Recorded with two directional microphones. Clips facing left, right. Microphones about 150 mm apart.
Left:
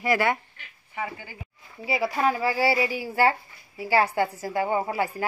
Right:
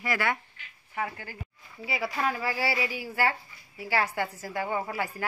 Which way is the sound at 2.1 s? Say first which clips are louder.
Left 6 dB; 30° left (ahead or behind).